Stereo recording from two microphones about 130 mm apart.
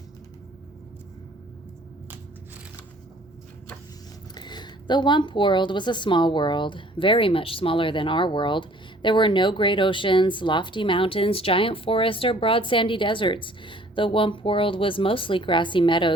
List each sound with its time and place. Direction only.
4.4 s speech: 35° left (ahead or behind)